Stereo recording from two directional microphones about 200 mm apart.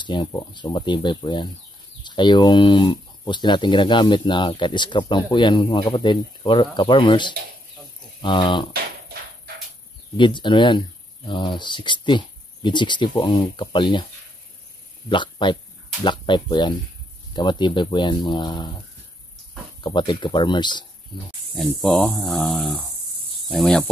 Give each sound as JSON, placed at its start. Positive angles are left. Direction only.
{"t": 0.0, "sound": "speech", "side_deg": 25}
{"t": 10.1, "sound": "speech", "side_deg": 25}
{"t": 15.0, "sound": "speech", "side_deg": 25}
{"t": 19.8, "sound": "speech", "side_deg": 25}
{"t": 21.5, "sound": "speech", "side_deg": 5}